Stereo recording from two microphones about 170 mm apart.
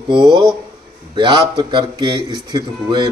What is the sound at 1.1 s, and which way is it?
Speech, 25° right (ahead or behind).